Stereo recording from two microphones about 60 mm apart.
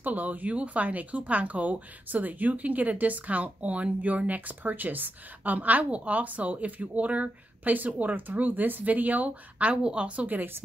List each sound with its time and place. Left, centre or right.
0.0 s speech: right